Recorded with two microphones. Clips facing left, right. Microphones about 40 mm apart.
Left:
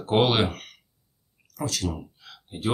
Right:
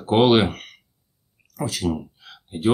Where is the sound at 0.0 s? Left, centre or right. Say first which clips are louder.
Right 5 dB; centre.